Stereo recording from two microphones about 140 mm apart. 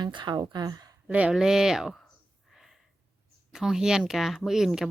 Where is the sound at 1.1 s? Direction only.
10° right (ahead or behind).